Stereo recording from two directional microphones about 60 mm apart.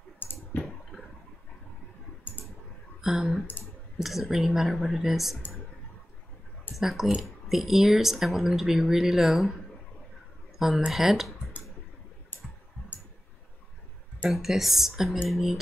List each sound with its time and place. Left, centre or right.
0.2 s clicking: left
3.0 s speech: centre
6.7 s speech: centre
10.9 s speech: centre
12.3 s clicking: left
14.3 s speech: centre